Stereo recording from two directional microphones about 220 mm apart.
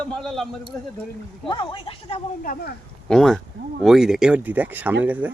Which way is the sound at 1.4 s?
20° left (ahead or behind).